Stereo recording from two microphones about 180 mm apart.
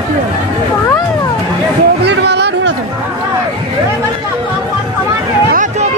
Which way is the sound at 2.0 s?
70° right (ahead or behind).